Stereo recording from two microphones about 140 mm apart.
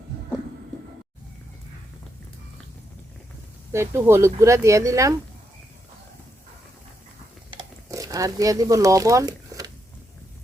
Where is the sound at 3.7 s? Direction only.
20° right (ahead or behind).